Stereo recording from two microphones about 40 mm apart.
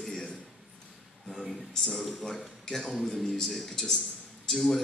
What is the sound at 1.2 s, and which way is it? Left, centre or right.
A man's voice, centre.